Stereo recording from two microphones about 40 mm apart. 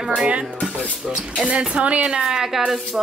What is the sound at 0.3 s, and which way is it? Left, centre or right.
Speech, right.